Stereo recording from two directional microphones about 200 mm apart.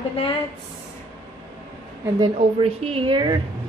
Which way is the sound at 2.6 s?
30° right (ahead or behind).